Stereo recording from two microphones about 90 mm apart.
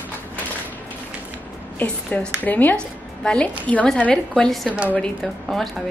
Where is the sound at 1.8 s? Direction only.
20° left (ahead or behind).